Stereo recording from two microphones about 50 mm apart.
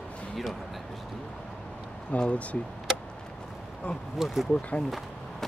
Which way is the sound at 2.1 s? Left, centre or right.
Left.